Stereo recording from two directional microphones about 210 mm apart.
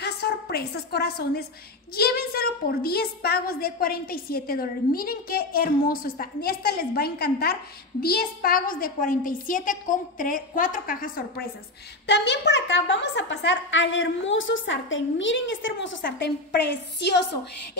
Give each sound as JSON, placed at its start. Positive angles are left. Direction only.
{"t": 0.0, "sound": "a woman's voice", "side_deg": 50}
{"t": 12.1, "sound": "a woman's voice", "side_deg": 55}